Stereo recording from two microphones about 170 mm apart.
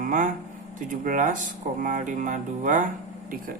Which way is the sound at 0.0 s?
50° right (ahead or behind).